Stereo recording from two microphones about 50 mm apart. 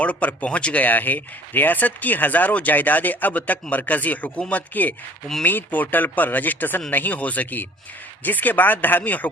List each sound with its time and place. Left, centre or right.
0.0 s speech: left